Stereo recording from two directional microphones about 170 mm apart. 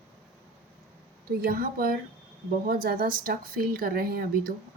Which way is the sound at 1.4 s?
60° right (ahead or behind).